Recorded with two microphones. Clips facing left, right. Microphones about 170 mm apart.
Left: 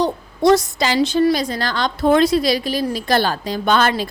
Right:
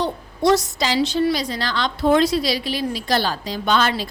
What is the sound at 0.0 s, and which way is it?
A woman's voice, 55° left (ahead or behind).